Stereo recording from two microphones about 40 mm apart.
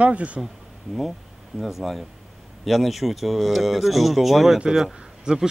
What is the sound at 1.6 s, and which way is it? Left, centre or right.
Speech, centre.